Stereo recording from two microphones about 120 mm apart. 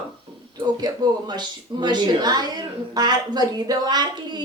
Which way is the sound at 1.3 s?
40° right (ahead or behind).